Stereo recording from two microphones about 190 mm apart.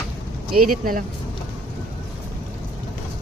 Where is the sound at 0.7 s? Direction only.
50° right (ahead or behind).